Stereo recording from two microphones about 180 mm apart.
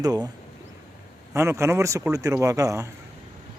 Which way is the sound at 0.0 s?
20° right (ahead or behind).